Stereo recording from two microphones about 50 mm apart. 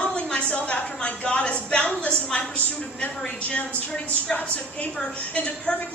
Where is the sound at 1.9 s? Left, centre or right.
Centre.